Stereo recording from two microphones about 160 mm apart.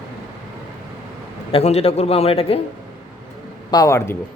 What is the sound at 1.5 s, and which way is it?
A man's voice, 40° left (ahead or behind).